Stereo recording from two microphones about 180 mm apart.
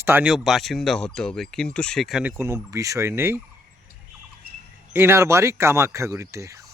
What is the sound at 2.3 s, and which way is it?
Speech, 15° right (ahead or behind).